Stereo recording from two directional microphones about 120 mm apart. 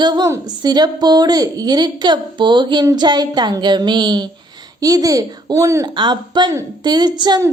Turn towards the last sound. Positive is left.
turn(degrees=-35)  # may be behind; listen again after turning